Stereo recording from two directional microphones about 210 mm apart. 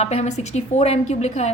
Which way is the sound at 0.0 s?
30° left (ahead or behind).